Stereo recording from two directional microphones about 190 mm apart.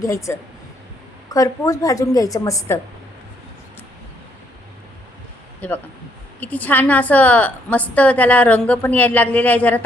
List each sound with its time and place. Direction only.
0.0 s a woman's voice: 15° left (ahead or behind)
5.5 s a woman's voice: 10° left (ahead or behind)